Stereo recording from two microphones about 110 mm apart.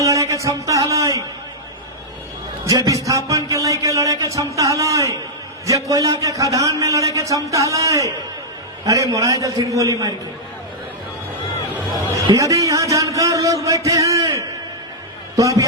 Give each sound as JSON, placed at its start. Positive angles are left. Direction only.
{"t": 0.0, "sound": "speech", "side_deg": -30}
{"t": 2.6, "sound": "a man's voice", "side_deg": -30}
{"t": 12.1, "sound": "a man's voice", "side_deg": -30}
{"t": 15.4, "sound": "a man's voice", "side_deg": -30}